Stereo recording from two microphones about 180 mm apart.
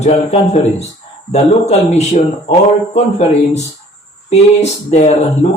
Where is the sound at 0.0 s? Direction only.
35° left (ahead or behind).